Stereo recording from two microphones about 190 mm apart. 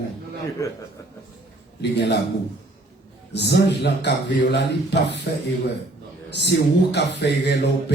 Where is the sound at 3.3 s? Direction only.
65° left (ahead or behind).